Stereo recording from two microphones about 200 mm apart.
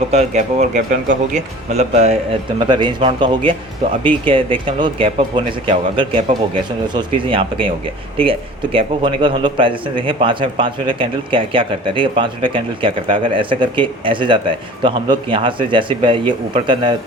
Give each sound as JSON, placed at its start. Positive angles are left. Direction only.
{"t": 0.1, "sound": "speech", "side_deg": -35}
{"t": 2.6, "sound": "a man's voice", "side_deg": -20}